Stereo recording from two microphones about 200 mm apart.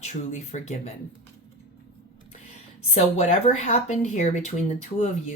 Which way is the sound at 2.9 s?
35° left (ahead or behind).